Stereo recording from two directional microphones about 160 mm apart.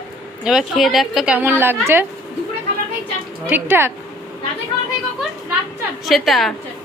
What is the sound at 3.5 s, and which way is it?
Speech, 15° right (ahead or behind).